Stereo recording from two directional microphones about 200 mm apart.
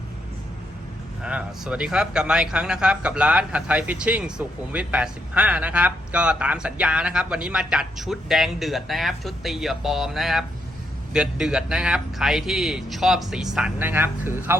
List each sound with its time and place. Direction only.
1.2 s speech: 5° right (ahead or behind)